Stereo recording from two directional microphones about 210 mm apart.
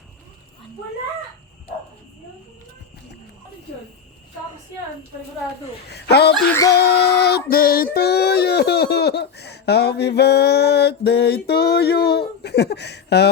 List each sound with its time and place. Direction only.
5.9 s music: 50° left (ahead or behind)
7.5 s speech: 45° left (ahead or behind)
12.4 s a sound: 50° left (ahead or behind)